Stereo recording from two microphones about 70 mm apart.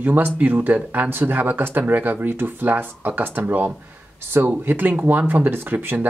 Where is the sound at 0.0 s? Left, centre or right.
Right.